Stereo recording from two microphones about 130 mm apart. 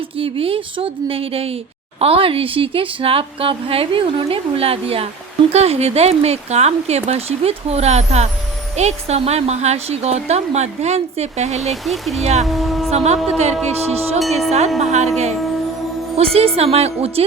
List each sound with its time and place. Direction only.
0.2 s a woman's voice: 45° right (ahead or behind)
11.6 s speech: centre (ahead or behind)
12.2 s speech: 55° right (ahead or behind)
12.5 s vehicle: centre (ahead or behind)
12.9 s speech: 55° right (ahead or behind)
14.2 s speech: centre (ahead or behind)
14.8 s a woman's voice: 60° right (ahead or behind)